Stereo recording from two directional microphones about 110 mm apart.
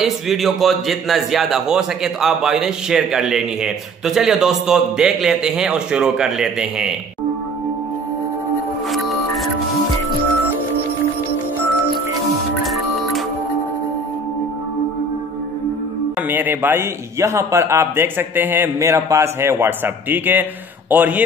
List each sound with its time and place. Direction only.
0.0 s a man's voice: centre (ahead or behind)
8.9 s music: centre (ahead or behind)
16.2 s a man's voice: 15° right (ahead or behind)